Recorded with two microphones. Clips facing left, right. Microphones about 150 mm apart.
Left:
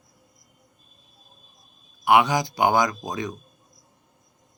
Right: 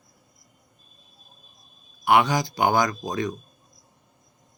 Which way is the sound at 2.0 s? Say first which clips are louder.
Left 1 dB; 15° left (ahead or behind).